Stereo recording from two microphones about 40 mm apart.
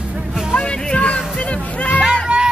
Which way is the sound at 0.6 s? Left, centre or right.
Left.